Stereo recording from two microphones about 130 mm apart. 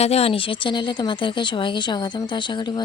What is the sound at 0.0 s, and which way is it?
Speech, 50° left (ahead or behind).